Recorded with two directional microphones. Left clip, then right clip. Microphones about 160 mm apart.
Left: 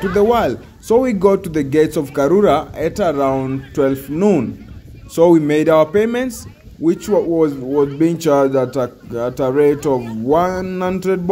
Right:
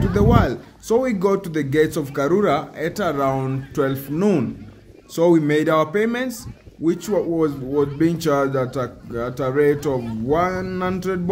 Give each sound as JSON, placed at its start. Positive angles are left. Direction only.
{"t": 0.1, "sound": "a man's voice", "side_deg": 20}